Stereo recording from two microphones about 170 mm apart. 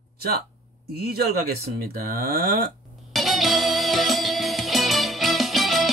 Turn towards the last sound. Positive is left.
turn(degrees=0)  # may be behind; listen again after turning